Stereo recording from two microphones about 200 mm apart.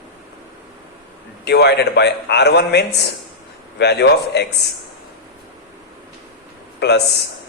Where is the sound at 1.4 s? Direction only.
55° left (ahead or behind).